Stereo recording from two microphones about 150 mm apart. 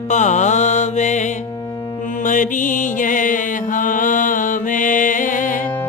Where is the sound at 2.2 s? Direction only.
60° left (ahead or behind).